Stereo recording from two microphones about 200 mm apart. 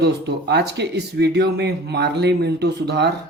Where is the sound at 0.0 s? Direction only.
55° right (ahead or behind).